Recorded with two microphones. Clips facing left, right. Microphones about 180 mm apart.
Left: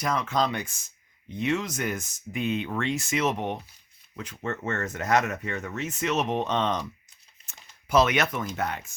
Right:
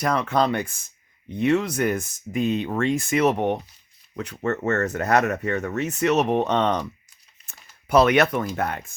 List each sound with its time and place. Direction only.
0.0 s speech: 65° right (ahead or behind)
2.4 s speech: 40° right (ahead or behind); by 6.8 s 65° right (ahead or behind)
7.4 s a sound: 60° right (ahead or behind)
8.5 s speech: 55° right (ahead or behind)